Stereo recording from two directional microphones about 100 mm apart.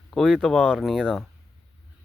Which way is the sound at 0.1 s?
5° left (ahead or behind).